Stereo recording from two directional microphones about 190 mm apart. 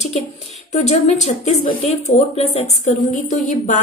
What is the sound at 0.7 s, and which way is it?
A woman's voice, 35° left (ahead or behind).